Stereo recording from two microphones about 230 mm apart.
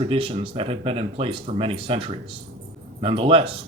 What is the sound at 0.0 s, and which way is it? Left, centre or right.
Speech, right.